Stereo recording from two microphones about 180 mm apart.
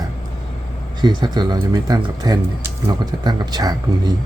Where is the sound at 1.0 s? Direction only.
20° right (ahead or behind).